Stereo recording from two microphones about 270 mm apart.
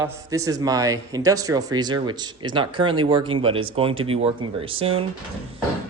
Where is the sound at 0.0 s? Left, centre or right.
Centre.